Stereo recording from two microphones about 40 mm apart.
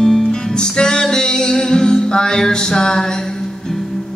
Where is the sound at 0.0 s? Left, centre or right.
Centre.